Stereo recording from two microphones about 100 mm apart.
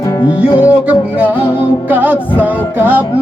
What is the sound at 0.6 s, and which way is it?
Music, 15° right (ahead or behind).